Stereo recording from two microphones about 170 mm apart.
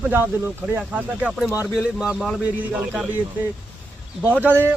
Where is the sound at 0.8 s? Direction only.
10° right (ahead or behind).